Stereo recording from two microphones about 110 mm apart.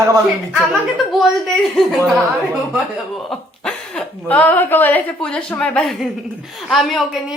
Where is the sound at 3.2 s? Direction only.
5° left (ahead or behind).